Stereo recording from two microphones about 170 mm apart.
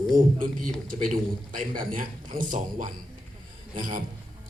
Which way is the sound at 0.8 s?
50° right (ahead or behind).